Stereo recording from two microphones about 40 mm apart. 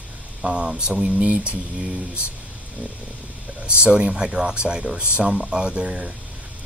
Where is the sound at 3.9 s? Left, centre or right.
Right.